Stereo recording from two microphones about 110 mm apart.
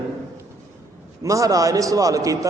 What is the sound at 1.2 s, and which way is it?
A man's voice, 30° right (ahead or behind).